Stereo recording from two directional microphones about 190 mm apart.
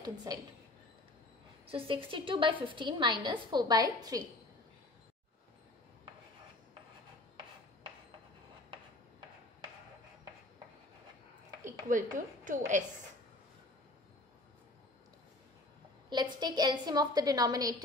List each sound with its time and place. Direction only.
0.0 s a woman's voice: 20° right (ahead or behind)
1.7 s a woman's voice: 30° right (ahead or behind)
11.9 s a woman's voice: 45° right (ahead or behind)
16.1 s a woman's voice: 20° right (ahead or behind)